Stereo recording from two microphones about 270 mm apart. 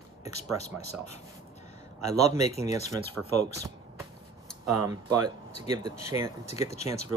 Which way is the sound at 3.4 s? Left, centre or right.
Centre.